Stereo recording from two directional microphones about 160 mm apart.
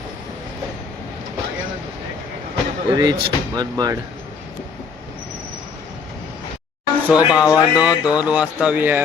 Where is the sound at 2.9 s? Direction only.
25° right (ahead or behind).